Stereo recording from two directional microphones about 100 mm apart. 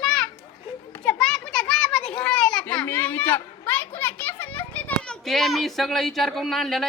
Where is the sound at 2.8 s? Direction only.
20° left (ahead or behind).